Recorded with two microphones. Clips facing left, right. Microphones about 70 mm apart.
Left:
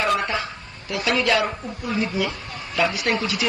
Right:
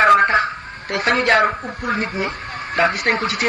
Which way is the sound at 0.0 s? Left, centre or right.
Right.